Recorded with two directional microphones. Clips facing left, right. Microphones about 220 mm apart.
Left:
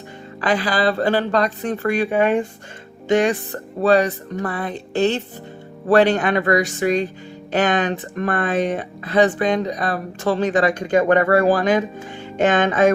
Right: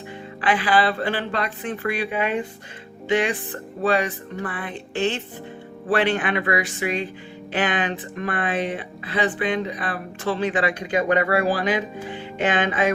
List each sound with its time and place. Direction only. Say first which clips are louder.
0.4 s speech: left 2 dB; 40° left (ahead or behind)